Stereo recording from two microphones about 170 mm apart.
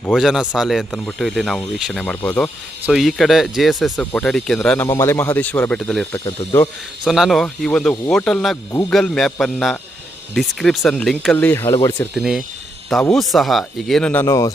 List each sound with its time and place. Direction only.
0.2 s speech: 5° right (ahead or behind)
6.1 s speech: 20° left (ahead or behind)
7.0 s speech: centre (ahead or behind)
11.8 s speech: 25° left (ahead or behind)
12.1 s speech: 5° right (ahead or behind); by 14.5 s 15° left (ahead or behind)